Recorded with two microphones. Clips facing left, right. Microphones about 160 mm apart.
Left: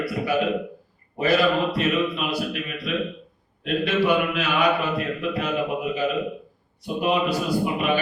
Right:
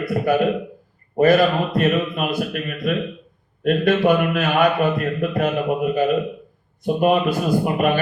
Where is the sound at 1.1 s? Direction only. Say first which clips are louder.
Right 5 dB; 50° right (ahead or behind).